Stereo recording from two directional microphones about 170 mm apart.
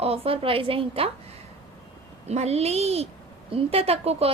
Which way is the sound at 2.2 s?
40° right (ahead or behind).